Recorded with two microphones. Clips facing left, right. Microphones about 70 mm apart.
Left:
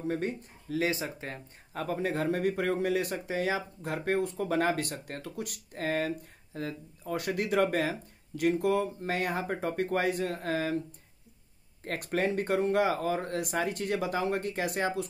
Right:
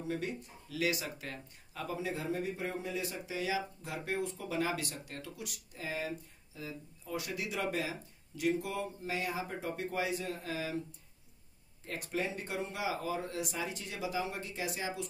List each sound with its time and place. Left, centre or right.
0.1 s speech: left
11.8 s speech: left